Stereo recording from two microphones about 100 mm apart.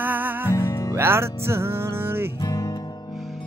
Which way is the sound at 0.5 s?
25° left (ahead or behind).